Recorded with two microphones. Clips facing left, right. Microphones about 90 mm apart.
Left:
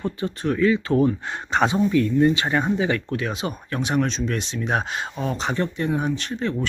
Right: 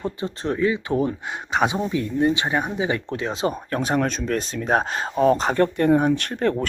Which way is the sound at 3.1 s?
30° right (ahead or behind).